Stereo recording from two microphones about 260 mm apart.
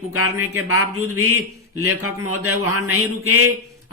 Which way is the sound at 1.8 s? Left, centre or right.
Right.